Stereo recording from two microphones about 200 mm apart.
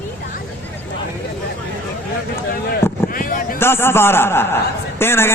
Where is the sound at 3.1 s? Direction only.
45° left (ahead or behind).